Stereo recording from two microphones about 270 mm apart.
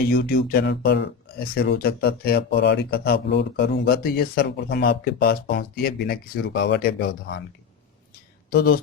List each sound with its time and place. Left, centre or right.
0.0 s speech: left
8.5 s speech: left